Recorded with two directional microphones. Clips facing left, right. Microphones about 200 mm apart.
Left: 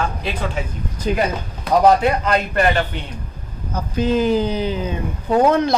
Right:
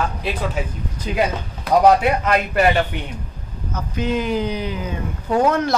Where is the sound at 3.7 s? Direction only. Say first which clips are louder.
Left 4 dB; 30° left (ahead or behind).